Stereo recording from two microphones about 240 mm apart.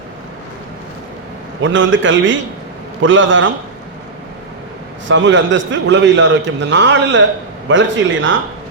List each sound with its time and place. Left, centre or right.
1.6 s a man's voice: right
5.0 s a man's voice: right